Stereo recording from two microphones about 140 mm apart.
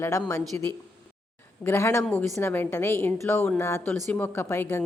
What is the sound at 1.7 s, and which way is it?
A woman's voice, 15° left (ahead or behind).